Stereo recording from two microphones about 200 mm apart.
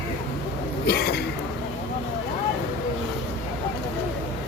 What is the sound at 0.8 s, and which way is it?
Speech, 50° left (ahead or behind).